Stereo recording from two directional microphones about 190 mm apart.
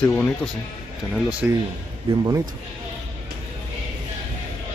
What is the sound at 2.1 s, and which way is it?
Speech, 30° right (ahead or behind).